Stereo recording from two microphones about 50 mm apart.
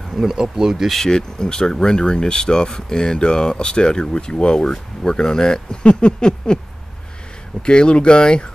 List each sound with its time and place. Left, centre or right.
0.1 s speech: centre
0.9 s speech: centre
7.6 s speech: centre